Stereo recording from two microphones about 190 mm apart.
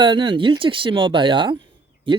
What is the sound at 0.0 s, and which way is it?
Speech, 25° right (ahead or behind).